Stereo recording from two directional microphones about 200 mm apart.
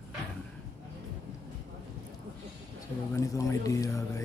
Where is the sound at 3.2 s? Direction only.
15° left (ahead or behind).